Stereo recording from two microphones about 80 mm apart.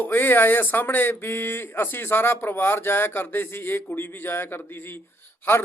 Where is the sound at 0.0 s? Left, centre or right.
Left.